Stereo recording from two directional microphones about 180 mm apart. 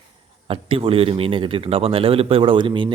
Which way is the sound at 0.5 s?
30° right (ahead or behind).